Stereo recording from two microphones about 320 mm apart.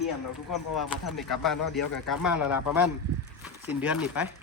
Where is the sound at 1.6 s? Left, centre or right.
Left.